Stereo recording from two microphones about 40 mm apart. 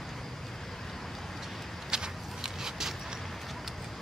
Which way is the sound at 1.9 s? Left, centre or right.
Centre.